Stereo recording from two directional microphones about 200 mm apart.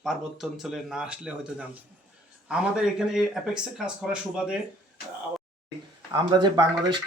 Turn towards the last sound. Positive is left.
turn(degrees=-25)  # may be behind; listen again after turning